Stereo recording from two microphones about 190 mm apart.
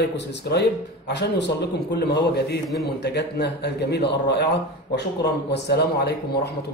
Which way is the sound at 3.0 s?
60° left (ahead or behind).